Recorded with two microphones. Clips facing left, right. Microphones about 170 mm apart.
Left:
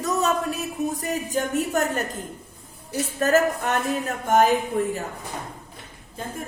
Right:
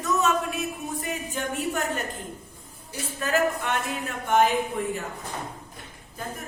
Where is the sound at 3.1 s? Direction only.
40° left (ahead or behind).